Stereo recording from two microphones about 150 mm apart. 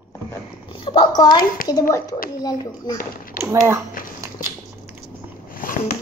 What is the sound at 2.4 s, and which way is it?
Speech, 25° left (ahead or behind).